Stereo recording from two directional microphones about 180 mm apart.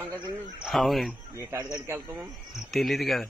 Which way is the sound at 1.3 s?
15° right (ahead or behind).